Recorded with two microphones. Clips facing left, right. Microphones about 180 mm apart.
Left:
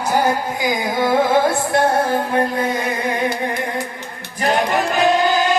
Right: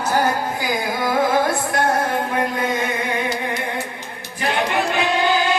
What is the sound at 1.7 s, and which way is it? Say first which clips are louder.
Music: left 3 dB; 30° left (ahead or behind).